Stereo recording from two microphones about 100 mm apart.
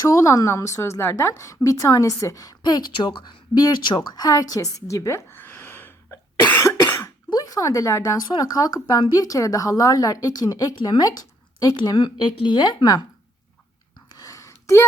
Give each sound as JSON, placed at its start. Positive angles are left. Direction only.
{"t": 0.0, "sound": "a woman's voice", "side_deg": 35}
{"t": 6.5, "sound": "cough", "side_deg": 20}
{"t": 7.3, "sound": "a woman's voice", "side_deg": 40}
{"t": 14.1, "sound": "a sound", "side_deg": 35}